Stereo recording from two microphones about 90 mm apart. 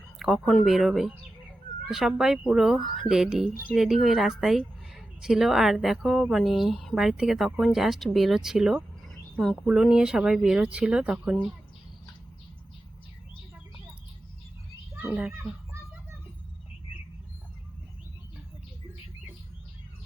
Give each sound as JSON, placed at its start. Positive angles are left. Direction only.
{"t": 0.2, "sound": "speech", "side_deg": 0}
{"t": 9.3, "sound": "speech", "side_deg": 5}
{"t": 9.8, "sound": "speech", "side_deg": -5}
{"t": 15.0, "sound": "a child's voice", "side_deg": -20}